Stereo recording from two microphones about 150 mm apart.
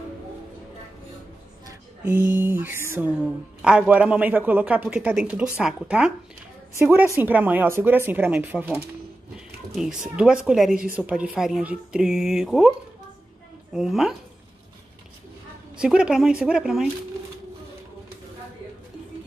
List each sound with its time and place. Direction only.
1.7 s music: 15° right (ahead or behind)
2.3 s a man's voice: 15° right (ahead or behind)
6.8 s a man's voice: 15° right (ahead or behind)
13.7 s a woman's voice: centre (ahead or behind)
15.8 s a woman's voice: 5° right (ahead or behind)